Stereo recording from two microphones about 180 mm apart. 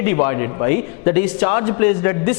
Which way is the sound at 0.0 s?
15° left (ahead or behind).